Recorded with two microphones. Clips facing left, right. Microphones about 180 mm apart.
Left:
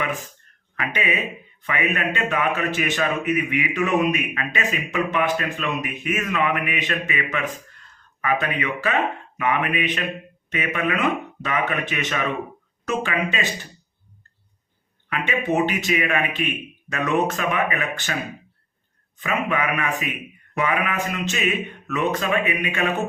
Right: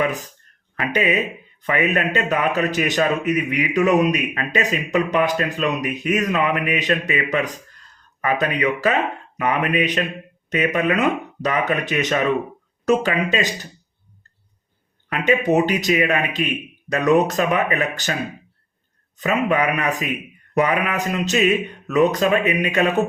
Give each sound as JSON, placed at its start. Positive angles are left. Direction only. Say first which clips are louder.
{"t": 0.0, "sound": "a man's voice", "louder": "right 5 dB", "side_deg": -40}
{"t": 15.1, "sound": "a man's voice", "louder": "right 5 dB", "side_deg": -40}
{"t": 19.1, "sound": "a man's voice", "louder": "right 5 dB", "side_deg": -40}